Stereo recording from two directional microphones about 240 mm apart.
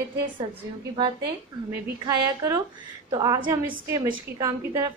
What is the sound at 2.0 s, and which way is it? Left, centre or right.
A woman's voice, centre.